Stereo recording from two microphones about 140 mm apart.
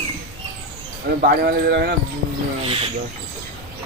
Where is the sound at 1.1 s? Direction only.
90° right.